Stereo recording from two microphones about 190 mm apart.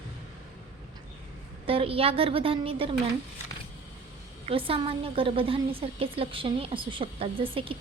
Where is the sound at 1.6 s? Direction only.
30° right (ahead or behind).